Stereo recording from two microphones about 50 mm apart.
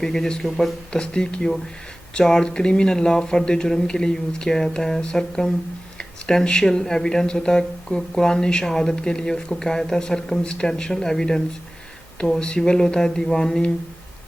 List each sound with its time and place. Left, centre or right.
0.0 s speech: centre
0.9 s speech: centre